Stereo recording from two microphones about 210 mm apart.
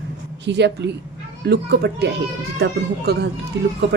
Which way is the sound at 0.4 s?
55° right (ahead or behind).